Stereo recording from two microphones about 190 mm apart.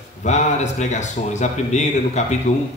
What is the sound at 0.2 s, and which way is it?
A man's voice, 40° left (ahead or behind).